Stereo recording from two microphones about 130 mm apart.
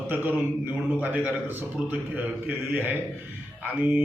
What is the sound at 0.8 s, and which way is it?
A man's voice, 15° right (ahead or behind).